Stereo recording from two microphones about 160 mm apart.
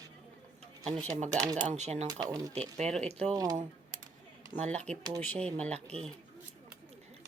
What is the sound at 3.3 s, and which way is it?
Speech, 25° right (ahead or behind).